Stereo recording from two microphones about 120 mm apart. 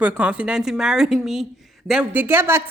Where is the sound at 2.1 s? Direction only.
15° right (ahead or behind).